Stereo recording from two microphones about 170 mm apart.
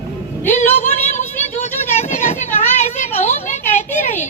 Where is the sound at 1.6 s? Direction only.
40° left (ahead or behind).